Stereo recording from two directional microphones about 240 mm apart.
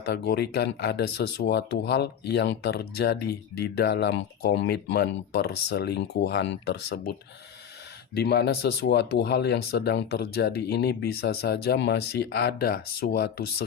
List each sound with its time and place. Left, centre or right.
0.0 s speech: left
8.1 s speech: left